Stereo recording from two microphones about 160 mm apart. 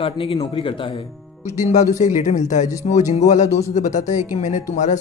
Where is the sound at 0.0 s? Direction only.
35° left (ahead or behind).